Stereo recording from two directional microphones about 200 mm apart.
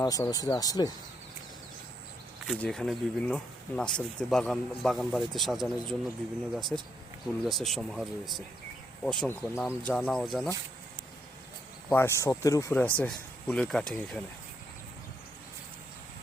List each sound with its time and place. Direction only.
0.0 s speech: 20° left (ahead or behind)
2.5 s speech: 5° left (ahead or behind)
11.9 s speech: 10° left (ahead or behind)